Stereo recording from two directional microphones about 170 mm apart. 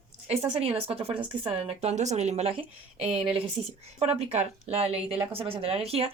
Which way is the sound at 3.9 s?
35° right (ahead or behind).